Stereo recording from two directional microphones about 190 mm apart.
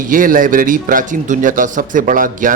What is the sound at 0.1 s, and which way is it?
Speech, 45° right (ahead or behind).